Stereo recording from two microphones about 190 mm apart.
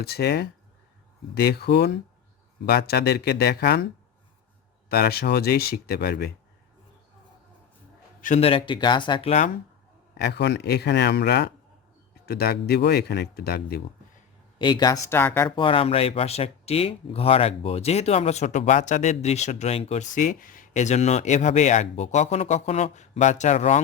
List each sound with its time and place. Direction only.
0.0 s speech: 55° left (ahead or behind)
4.9 s speech: 55° left (ahead or behind)
8.2 s speech: 35° left (ahead or behind)
10.2 s speech: 60° left (ahead or behind)
14.6 s speech: 20° left (ahead or behind)
15.4 s speech: 25° left (ahead or behind)